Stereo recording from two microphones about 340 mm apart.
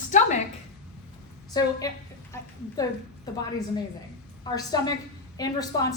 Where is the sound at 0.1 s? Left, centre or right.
Left.